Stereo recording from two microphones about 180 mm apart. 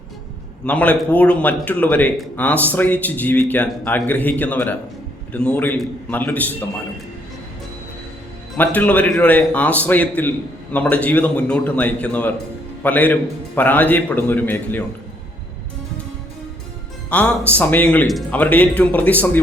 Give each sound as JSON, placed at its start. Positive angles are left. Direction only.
{"t": 0.6, "sound": "a man's voice", "side_deg": 10}
{"t": 8.5, "sound": "a man's voice", "side_deg": 10}
{"t": 17.1, "sound": "a man's voice", "side_deg": 5}